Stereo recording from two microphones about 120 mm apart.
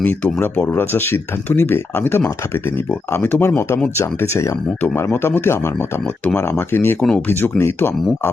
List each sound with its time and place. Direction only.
0.0 s speech: 15° left (ahead or behind)